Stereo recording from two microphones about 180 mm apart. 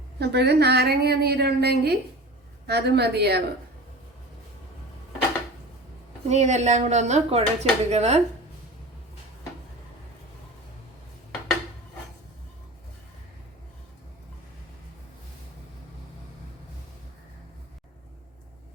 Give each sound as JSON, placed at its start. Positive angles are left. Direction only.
{"t": 0.2, "sound": "a woman's voice", "side_deg": -65}
{"t": 6.2, "sound": "speech", "side_deg": -40}